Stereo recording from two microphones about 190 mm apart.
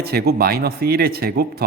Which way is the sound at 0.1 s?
55° right (ahead or behind).